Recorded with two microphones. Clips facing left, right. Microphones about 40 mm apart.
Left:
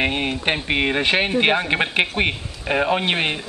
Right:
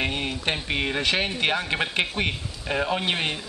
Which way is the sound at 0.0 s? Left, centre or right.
Left.